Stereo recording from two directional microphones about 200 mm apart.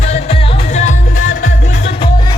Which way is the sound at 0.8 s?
40° left (ahead or behind).